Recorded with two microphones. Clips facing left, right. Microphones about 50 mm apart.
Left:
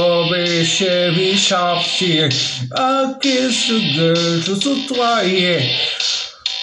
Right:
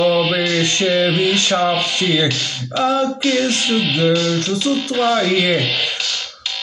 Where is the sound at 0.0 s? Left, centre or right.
Centre.